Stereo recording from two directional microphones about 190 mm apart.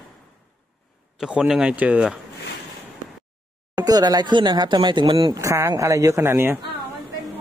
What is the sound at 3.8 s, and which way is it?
Speech, 20° right (ahead or behind).